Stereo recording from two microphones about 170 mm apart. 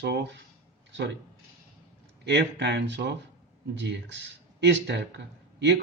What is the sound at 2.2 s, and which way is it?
Speech, 90° right.